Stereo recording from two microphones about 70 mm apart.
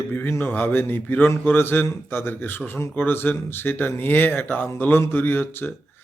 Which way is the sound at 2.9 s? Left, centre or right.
Left.